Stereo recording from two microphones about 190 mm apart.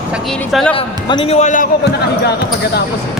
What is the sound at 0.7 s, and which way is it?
Speech, 30° left (ahead or behind).